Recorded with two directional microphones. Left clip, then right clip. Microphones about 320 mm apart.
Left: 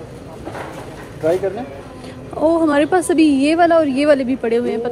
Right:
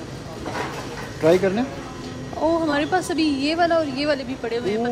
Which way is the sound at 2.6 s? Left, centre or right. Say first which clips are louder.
Left 7 dB; centre.